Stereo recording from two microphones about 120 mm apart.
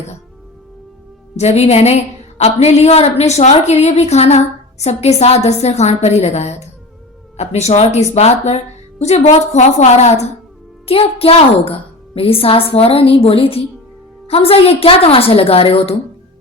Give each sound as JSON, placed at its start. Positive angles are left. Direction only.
{"t": 1.4, "sound": "a woman's voice", "side_deg": 65}
{"t": 10.8, "sound": "a woman's voice", "side_deg": 50}